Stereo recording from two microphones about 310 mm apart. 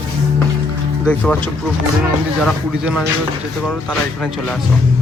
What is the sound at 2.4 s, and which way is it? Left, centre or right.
Speech, centre.